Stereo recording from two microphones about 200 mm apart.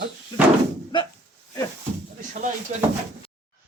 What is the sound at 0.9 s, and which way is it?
Speech, 25° left (ahead or behind).